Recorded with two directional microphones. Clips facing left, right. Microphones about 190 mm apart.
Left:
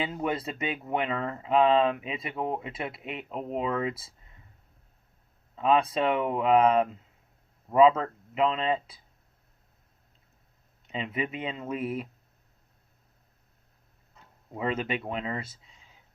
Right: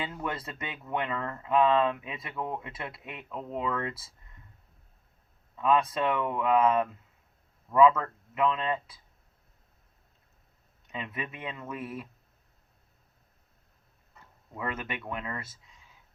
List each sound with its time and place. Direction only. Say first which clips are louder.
0.0 s speech: left 5 dB; 20° left (ahead or behind)
5.5 s speech: left 2 dB; 20° left (ahead or behind)
10.8 s speech: left 5 dB; 25° left (ahead or behind)
14.5 s speech: left 6 dB; 25° left (ahead or behind)